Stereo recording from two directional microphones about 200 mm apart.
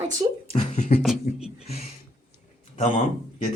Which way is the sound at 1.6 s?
30° left (ahead or behind).